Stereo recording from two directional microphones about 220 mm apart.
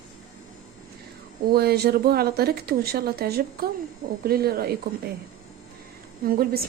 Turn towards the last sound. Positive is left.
turn(degrees=-40)  # may be behind; listen again after turning